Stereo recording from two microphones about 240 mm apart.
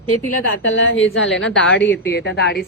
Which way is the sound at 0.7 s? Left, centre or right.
Left.